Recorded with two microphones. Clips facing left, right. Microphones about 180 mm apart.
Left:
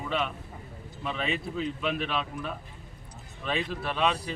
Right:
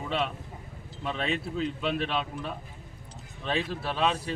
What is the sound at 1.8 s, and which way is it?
Speech, 30° right (ahead or behind).